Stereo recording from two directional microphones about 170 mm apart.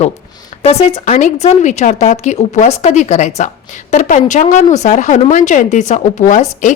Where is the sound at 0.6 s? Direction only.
35° left (ahead or behind).